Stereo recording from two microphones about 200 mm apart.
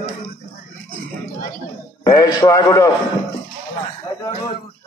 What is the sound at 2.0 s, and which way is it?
Speech, 20° left (ahead or behind).